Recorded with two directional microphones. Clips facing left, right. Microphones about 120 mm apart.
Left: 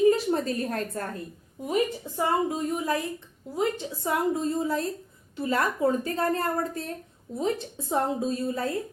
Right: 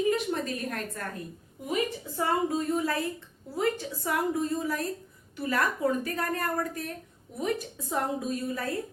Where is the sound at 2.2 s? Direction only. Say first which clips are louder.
Left 2 dB; 20° left (ahead or behind).